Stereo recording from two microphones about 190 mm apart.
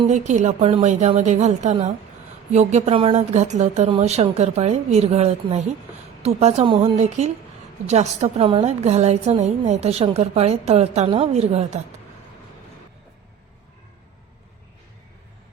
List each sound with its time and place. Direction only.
0.1 s a woman's voice: 40° right (ahead or behind)